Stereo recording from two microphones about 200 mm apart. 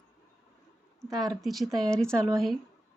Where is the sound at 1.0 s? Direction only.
20° right (ahead or behind).